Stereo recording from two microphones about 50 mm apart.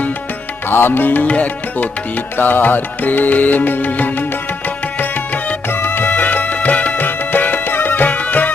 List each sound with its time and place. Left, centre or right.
0.7 s music: left